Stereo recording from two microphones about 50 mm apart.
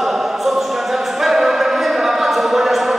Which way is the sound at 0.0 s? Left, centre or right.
Centre.